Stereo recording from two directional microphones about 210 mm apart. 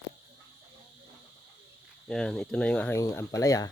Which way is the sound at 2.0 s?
5° left (ahead or behind).